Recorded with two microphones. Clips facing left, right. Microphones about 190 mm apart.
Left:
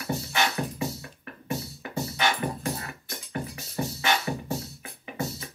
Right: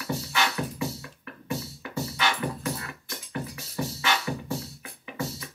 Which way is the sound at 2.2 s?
45° left (ahead or behind).